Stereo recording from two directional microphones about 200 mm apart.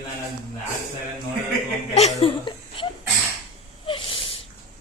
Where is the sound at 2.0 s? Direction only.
30° left (ahead or behind).